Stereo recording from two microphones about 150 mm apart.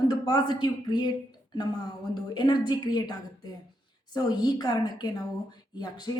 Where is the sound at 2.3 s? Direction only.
30° left (ahead or behind).